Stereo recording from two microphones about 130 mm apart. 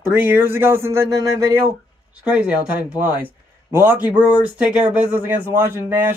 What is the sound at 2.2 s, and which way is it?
Speech, 10° right (ahead or behind).